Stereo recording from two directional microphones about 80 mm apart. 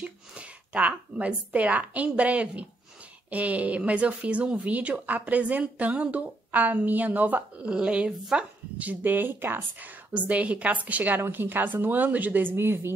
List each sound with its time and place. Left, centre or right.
0.0 s speech: centre